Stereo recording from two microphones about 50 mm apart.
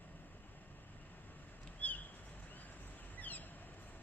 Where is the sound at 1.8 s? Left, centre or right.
Left.